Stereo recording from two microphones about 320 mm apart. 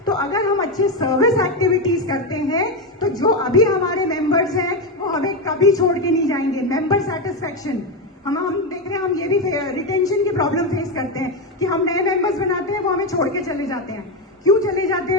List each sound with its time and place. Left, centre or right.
0.0 s a man's voice: centre